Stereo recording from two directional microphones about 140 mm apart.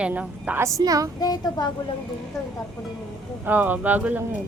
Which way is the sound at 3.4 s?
15° right (ahead or behind).